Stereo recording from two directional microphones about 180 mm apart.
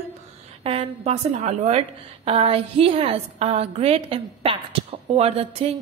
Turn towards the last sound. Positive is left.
turn(degrees=-35)  # may be behind; listen again after turning